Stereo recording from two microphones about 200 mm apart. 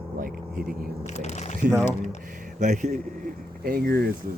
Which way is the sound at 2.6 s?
35° right (ahead or behind).